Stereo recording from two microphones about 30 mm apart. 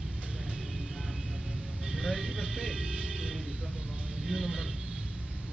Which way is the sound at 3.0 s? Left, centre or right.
Centre.